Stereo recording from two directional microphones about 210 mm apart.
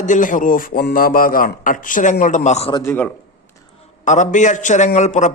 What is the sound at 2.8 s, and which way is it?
Speech, 10° left (ahead or behind).